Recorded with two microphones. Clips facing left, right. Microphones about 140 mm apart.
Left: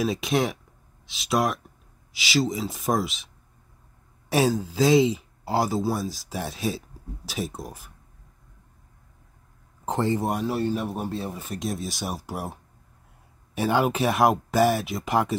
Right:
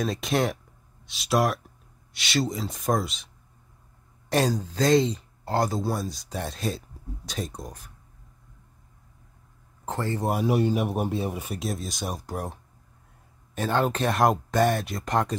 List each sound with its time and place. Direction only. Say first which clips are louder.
0.0 s speech: left 1 dB; centre (ahead or behind)
4.3 s speech: left 2 dB; 5° left (ahead or behind)
9.8 s speech: left 5 dB; 15° left (ahead or behind)
10.4 s speech: right 2 dB; 15° right (ahead or behind)
11.6 s speech: left 3 dB; centre (ahead or behind)
13.6 s speech: left 2 dB; 10° left (ahead or behind)